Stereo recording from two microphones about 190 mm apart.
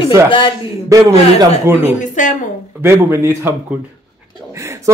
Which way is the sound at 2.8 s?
15° right (ahead or behind).